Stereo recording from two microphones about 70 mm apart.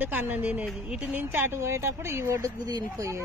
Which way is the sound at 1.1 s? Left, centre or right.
Right.